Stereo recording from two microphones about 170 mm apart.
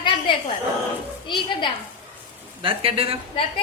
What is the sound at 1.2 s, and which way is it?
Speech, 30° left (ahead or behind).